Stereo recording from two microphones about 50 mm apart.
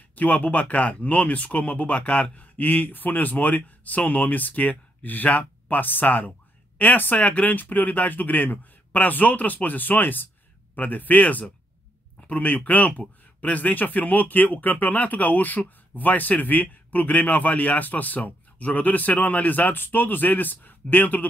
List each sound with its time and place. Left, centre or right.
0.1 s speech: left